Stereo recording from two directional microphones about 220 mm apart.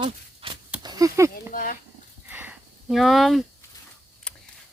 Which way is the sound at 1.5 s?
40° left (ahead or behind).